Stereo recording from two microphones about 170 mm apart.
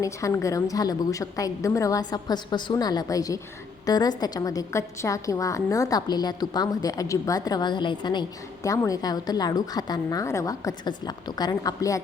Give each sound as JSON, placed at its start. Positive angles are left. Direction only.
{"t": 0.0, "sound": "a woman's voice", "side_deg": 20}